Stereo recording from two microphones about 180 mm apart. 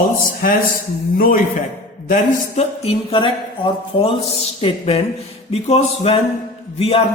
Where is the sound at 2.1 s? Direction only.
35° left (ahead or behind).